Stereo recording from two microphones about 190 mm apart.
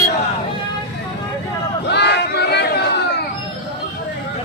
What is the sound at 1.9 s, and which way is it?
Crowd, 65° left (ahead or behind).